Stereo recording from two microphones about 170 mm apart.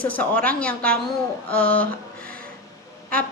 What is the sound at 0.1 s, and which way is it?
A woman's voice, 10° left (ahead or behind).